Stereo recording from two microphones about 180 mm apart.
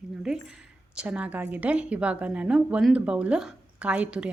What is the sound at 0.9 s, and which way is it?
A woman's voice, 5° right (ahead or behind).